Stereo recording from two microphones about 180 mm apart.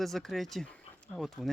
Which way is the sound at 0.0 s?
Centre (ahead or behind).